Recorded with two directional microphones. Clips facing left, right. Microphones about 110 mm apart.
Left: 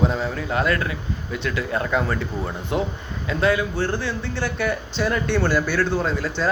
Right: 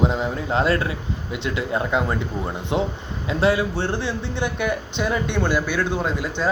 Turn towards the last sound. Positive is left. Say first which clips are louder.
# even
turn(degrees=-15)  # may be behind; listen again after turning